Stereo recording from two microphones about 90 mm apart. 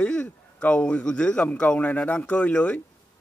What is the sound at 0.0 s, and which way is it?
A man's voice, 15° left (ahead or behind).